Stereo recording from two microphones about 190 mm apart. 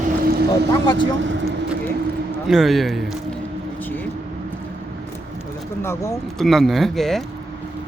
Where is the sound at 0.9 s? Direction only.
70° right (ahead or behind).